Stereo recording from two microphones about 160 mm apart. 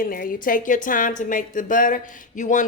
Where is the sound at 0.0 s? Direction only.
60° left (ahead or behind).